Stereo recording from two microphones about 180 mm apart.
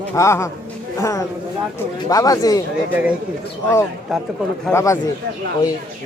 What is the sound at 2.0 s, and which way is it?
Speech, 20° left (ahead or behind).